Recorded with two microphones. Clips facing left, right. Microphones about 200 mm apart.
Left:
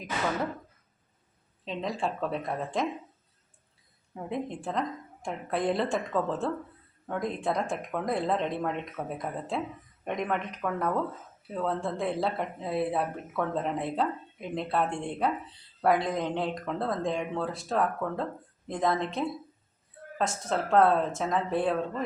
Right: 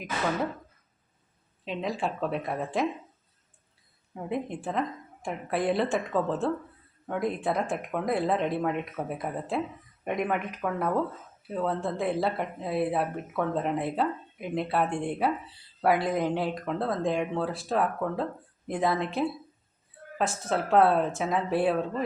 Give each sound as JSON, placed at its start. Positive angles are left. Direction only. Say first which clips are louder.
{"t": 1.6, "sound": "speech", "louder": "right 1 dB", "side_deg": 0}
{"t": 4.1, "sound": "speech", "louder": "right 2 dB", "side_deg": -5}